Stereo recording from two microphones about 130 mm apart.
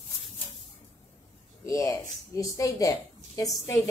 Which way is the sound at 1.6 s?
25° left (ahead or behind).